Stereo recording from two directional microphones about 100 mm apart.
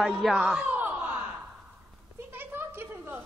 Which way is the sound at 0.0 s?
5° right (ahead or behind).